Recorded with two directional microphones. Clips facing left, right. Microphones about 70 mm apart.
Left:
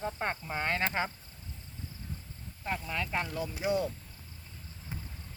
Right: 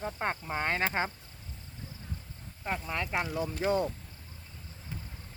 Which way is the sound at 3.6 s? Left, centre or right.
Centre.